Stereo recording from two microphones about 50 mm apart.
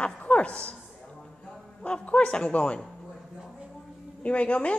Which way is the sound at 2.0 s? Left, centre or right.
Left.